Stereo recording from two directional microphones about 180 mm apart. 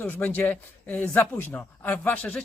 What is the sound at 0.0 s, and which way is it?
A man's voice, 10° left (ahead or behind).